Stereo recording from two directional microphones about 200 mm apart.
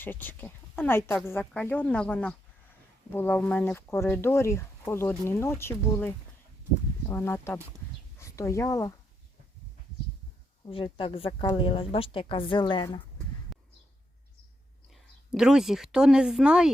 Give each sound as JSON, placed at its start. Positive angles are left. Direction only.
{"t": 0.0, "sound": "speech", "side_deg": 10}
{"t": 10.7, "sound": "a woman's voice", "side_deg": 25}
{"t": 13.5, "sound": "a sound", "side_deg": 0}
{"t": 14.9, "sound": "speech", "side_deg": -5}